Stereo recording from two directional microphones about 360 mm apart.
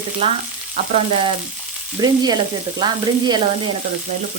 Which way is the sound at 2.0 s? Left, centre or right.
Centre.